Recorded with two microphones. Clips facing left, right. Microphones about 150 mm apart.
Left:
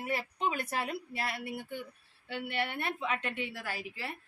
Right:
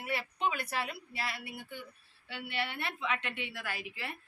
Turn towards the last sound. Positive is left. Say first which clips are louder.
# left 1 dB
turn(degrees=35)  # may be behind; listen again after turning